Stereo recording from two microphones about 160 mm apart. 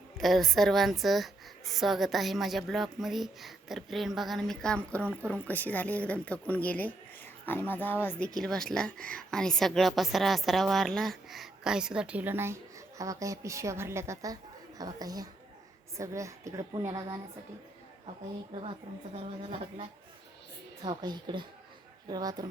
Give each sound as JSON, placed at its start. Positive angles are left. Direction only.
{"t": 0.2, "sound": "a woman's voice", "side_deg": 0}
{"t": 19.1, "sound": "speech", "side_deg": -40}
{"t": 20.8, "sound": "a woman's voice", "side_deg": -25}